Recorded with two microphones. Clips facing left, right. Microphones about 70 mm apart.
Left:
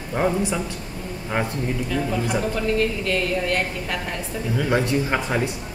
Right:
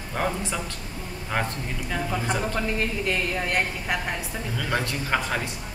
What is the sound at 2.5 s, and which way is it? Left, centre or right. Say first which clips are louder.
A woman's voice: left 5 dB; centre.